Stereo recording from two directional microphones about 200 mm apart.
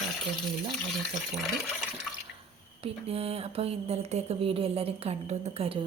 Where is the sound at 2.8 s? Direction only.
30° right (ahead or behind).